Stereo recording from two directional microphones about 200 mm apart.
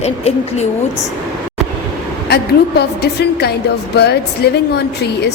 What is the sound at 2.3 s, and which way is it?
A woman's voice, 55° left (ahead or behind).